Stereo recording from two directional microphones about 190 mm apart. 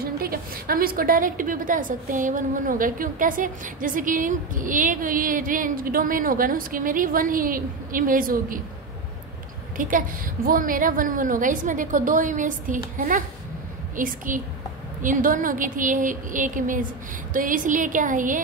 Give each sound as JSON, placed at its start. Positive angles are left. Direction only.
{"t": 0.0, "sound": "a woman's voice", "side_deg": -50}
{"t": 9.8, "sound": "a woman's voice", "side_deg": -45}